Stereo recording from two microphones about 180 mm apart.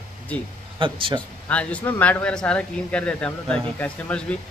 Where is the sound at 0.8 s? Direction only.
30° right (ahead or behind).